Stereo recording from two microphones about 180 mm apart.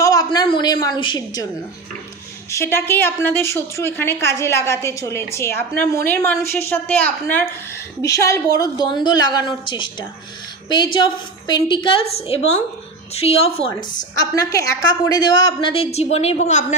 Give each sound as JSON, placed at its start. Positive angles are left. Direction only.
{"t": 0.0, "sound": "a sound", "side_deg": 20}
{"t": 2.5, "sound": "a woman's voice", "side_deg": 15}
{"t": 14.2, "sound": "a woman's voice", "side_deg": 20}